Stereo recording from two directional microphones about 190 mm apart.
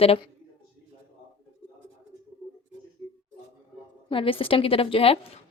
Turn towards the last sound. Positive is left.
turn(degrees=30)  # may be behind; listen again after turning